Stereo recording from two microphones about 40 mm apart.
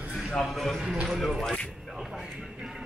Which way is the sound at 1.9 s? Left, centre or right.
Centre.